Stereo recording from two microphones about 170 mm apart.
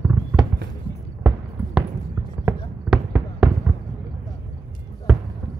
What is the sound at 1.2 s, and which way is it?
Basketball bounce, 5° right (ahead or behind).